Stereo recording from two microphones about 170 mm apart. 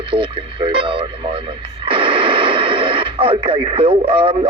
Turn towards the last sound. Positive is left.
turn(degrees=-30)  # may be behind; listen again after turning